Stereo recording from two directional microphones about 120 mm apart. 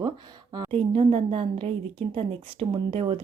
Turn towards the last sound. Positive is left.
turn(degrees=-50)  # may be behind; listen again after turning